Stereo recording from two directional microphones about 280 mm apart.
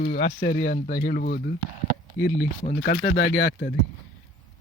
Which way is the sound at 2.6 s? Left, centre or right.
Left.